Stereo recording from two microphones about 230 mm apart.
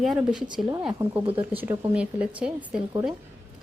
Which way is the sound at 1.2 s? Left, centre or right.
Right.